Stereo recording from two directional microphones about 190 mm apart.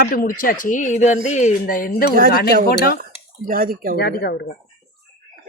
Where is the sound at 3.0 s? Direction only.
45° right (ahead or behind).